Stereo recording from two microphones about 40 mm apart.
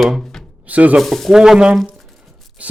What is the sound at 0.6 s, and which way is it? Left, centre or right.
Speech, right.